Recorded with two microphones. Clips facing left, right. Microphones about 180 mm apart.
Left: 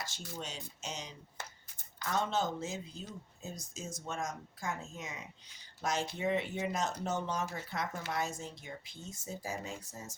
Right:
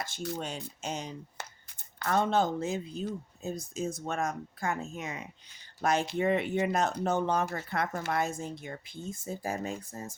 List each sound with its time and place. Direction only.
0.0 s speech: 60° right (ahead or behind)